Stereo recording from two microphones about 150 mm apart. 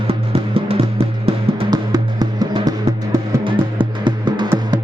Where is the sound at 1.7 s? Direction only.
25° right (ahead or behind).